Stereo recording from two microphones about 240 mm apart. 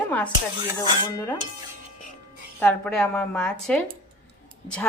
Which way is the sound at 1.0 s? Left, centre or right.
Centre.